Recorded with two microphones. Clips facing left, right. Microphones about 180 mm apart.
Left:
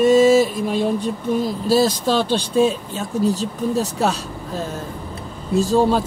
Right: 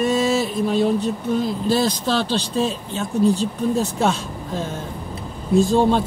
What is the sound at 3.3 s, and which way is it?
Speech, 40° left (ahead or behind).